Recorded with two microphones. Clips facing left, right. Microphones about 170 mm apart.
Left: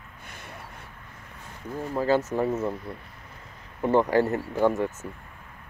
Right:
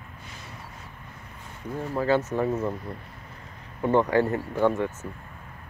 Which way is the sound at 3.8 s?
5° left (ahead or behind).